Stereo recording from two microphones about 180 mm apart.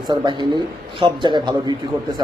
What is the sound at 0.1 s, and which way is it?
A man's voice, 25° right (ahead or behind).